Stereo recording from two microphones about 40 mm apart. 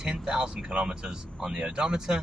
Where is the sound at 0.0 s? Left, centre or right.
Centre.